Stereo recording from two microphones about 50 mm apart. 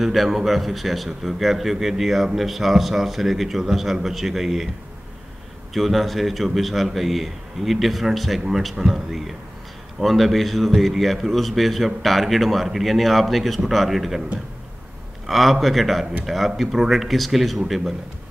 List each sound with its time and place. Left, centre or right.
0.0 s a man's voice: centre
5.7 s a man's voice: centre
15.2 s a man's voice: centre